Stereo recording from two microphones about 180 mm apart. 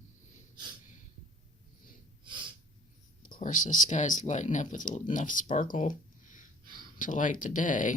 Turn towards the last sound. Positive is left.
turn(degrees=45)  # may be behind; listen again after turning